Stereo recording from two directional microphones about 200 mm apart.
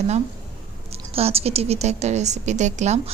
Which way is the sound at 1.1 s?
30° right (ahead or behind).